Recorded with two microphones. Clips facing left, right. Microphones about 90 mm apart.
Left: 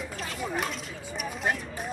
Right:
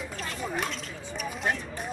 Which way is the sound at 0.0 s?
Centre (ahead or behind).